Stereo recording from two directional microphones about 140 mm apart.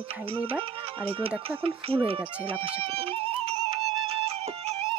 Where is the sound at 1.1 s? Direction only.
40° right (ahead or behind).